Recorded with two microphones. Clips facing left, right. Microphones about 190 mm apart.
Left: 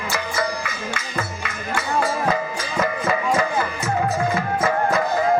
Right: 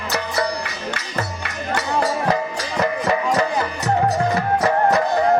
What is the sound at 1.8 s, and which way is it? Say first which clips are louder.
Music: right 1 dB; 40° right (ahead or behind).